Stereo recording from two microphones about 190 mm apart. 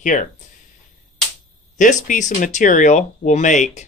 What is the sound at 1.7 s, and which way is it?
Speech, 40° left (ahead or behind).